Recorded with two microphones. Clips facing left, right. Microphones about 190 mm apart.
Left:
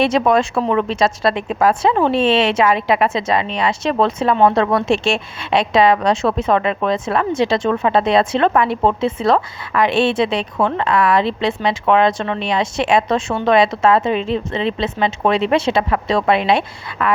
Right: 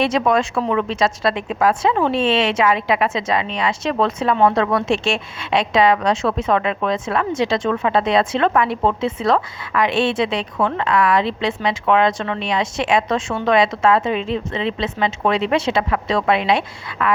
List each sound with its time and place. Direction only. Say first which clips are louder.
0.0 s a woman's voice: left 3 dB; 30° left (ahead or behind)